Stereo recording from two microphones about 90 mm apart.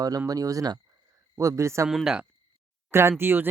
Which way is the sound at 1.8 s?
5° right (ahead or behind).